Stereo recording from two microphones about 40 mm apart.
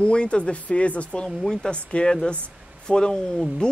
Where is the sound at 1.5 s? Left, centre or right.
Centre.